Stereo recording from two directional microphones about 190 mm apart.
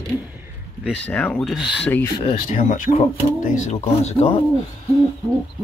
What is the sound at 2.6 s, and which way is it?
Speech, 45° left (ahead or behind).